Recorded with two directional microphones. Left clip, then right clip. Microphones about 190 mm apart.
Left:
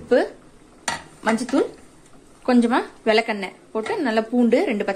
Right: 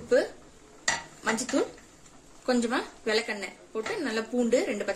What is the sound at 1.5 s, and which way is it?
A woman's voice, 45° left (ahead or behind).